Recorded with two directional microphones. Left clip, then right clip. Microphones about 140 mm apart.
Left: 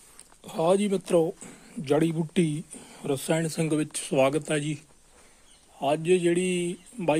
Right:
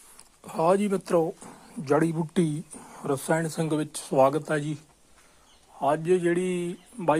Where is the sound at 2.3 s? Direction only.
35° right (ahead or behind).